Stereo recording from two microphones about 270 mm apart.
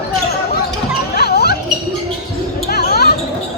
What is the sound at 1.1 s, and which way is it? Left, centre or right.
Music, left.